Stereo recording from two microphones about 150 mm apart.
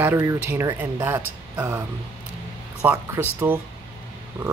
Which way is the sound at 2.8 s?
10° right (ahead or behind).